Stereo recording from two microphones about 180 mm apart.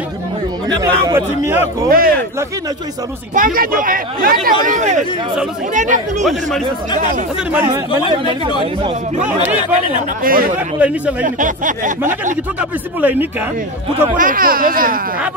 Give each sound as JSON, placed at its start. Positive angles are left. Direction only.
{"t": 0.7, "sound": "speech", "side_deg": -20}
{"t": 1.9, "sound": "speech", "side_deg": -55}
{"t": 3.3, "sound": "speech", "side_deg": -50}
{"t": 9.2, "sound": "speech", "side_deg": -10}
{"t": 9.9, "sound": "speech", "side_deg": -50}
{"t": 10.8, "sound": "speech", "side_deg": -10}
{"t": 11.2, "sound": "speech", "side_deg": -45}
{"t": 12.5, "sound": "speech", "side_deg": -10}
{"t": 14.1, "sound": "speech", "side_deg": -50}